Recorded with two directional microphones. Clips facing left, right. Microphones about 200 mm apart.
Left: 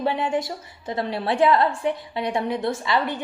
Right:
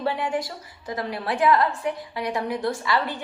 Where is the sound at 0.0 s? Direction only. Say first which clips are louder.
Left 2 dB; 20° left (ahead or behind).